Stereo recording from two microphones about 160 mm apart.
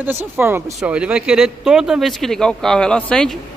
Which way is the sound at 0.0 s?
15° right (ahead or behind).